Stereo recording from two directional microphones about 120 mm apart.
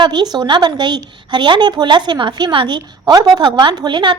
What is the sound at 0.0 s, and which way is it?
A woman's voice, 35° right (ahead or behind).